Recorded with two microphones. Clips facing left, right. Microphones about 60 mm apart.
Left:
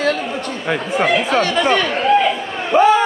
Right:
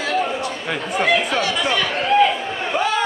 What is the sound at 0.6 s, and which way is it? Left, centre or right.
Speech, centre.